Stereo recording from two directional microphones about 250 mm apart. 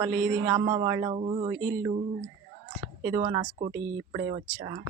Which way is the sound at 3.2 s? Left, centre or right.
Centre.